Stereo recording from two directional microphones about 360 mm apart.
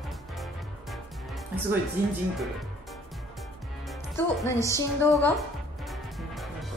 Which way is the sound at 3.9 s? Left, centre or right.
Centre.